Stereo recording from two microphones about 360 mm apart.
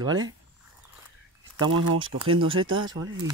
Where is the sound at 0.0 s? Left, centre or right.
Centre.